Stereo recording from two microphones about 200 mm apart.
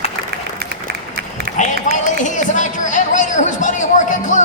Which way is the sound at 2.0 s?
40° left (ahead or behind).